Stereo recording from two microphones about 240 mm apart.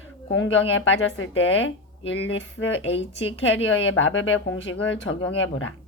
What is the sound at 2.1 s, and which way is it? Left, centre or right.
Speech, left.